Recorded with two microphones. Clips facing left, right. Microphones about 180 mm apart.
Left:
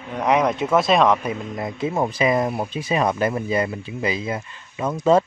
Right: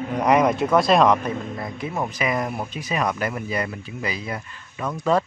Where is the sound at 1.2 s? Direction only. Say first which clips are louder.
Left 1 dB; 20° left (ahead or behind).